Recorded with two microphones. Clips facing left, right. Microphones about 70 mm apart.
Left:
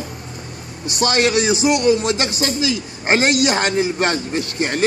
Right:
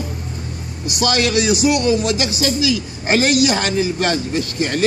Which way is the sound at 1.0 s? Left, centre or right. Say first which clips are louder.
Left 1 dB; left.